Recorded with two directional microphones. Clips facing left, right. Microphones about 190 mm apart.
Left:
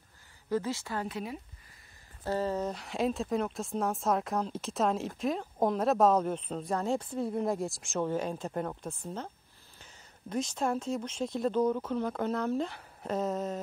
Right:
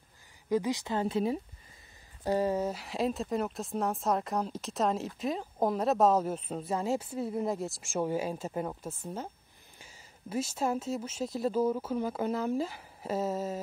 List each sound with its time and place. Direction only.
0.5 s speech: 15° right (ahead or behind)
2.2 s speech: 10° right (ahead or behind)